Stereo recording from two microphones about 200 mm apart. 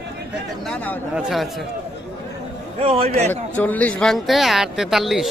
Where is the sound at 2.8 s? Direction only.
30° right (ahead or behind).